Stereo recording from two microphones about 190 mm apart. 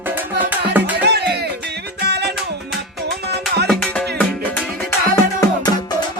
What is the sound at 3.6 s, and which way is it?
Music, 5° left (ahead or behind).